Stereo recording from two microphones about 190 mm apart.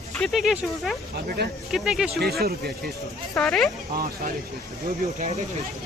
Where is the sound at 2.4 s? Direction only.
55° right (ahead or behind).